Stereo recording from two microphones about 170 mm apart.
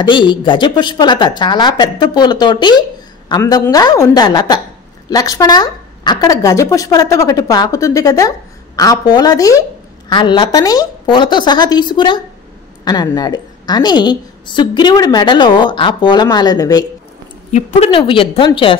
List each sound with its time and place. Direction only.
0.0 s a woman's voice: 30° left (ahead or behind)
17.5 s a woman's voice: 45° left (ahead or behind); by 18.8 s 30° left (ahead or behind)